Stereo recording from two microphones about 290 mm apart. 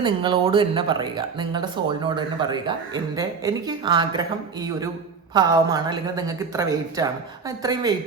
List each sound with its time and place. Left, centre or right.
0.0 s speech: centre